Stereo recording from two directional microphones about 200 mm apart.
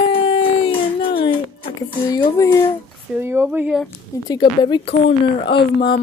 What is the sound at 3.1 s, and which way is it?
Speech, 10° right (ahead or behind).